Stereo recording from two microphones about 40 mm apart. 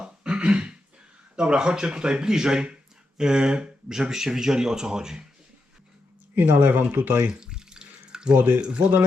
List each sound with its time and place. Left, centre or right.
0.0 s throat clearing: right
1.4 s speech: right
6.3 s speech: right
7.3 s water tap: centre
8.3 s speech: right